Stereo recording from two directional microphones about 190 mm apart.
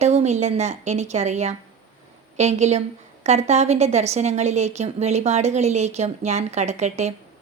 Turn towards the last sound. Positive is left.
turn(degrees=-35)  # may be behind; listen again after turning